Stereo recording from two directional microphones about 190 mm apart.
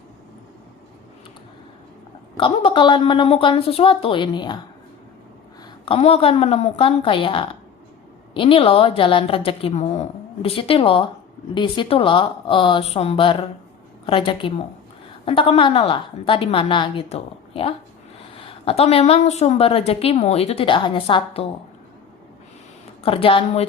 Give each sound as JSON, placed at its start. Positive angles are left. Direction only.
{"t": 2.4, "sound": "a woman's voice", "side_deg": 25}
{"t": 5.8, "sound": "a woman's voice", "side_deg": 30}
{"t": 23.0, "sound": "a woman's voice", "side_deg": 30}